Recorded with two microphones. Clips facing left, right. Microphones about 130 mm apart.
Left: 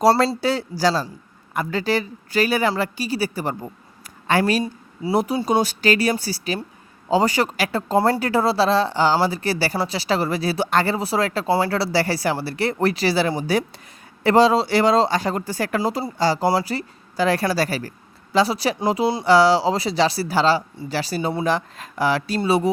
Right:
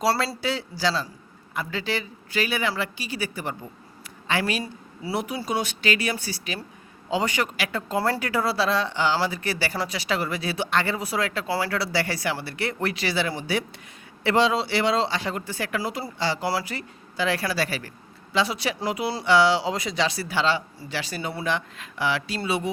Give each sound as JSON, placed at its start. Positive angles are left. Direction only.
{"t": 0.0, "sound": "speech", "side_deg": 45}